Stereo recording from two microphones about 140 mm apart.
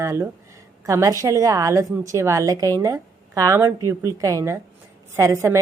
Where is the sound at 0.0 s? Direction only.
20° right (ahead or behind).